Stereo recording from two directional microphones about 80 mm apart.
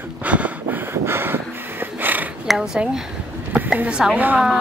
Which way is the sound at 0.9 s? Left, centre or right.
Right.